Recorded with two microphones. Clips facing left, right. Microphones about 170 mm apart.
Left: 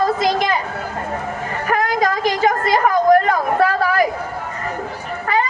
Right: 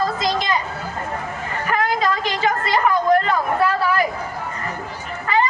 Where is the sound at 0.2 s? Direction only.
55° left (ahead or behind).